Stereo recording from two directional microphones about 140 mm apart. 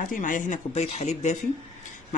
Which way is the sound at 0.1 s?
70° left (ahead or behind).